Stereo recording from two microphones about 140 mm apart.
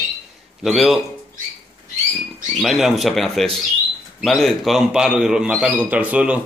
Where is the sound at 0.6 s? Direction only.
Centre (ahead or behind).